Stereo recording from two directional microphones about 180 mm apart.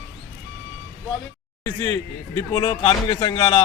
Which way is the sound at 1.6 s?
15° left (ahead or behind).